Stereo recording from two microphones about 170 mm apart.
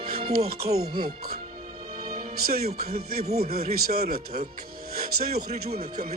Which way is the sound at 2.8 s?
65° right (ahead or behind).